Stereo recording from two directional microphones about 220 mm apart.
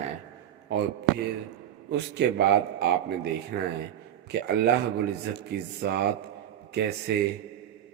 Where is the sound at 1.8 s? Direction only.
50° right (ahead or behind).